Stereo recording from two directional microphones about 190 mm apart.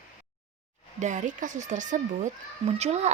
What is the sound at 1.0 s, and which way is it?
A woman's voice, 40° right (ahead or behind).